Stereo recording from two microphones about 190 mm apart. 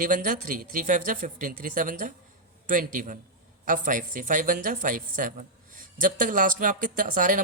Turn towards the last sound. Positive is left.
turn(degrees=-45)  # may be behind; listen again after turning